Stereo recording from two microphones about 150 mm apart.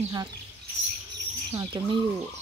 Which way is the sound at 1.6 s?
25° right (ahead or behind).